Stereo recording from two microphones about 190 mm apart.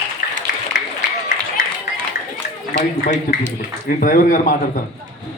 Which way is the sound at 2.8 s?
50° left (ahead or behind).